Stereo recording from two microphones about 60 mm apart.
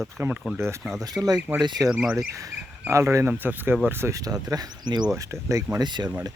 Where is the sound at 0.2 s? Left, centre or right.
Right.